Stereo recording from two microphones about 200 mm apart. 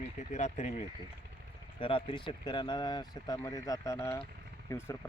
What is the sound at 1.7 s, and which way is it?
Speech, 25° left (ahead or behind).